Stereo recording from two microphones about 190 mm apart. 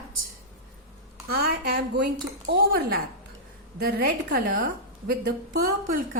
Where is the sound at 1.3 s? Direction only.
55° right (ahead or behind).